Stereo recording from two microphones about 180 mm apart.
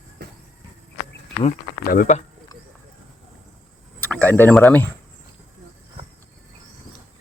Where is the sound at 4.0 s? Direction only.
5° left (ahead or behind).